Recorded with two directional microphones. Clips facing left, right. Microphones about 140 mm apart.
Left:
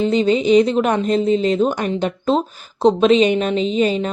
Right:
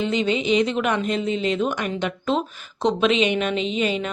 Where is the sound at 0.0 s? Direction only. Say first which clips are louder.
Left 6 dB; 35° left (ahead or behind).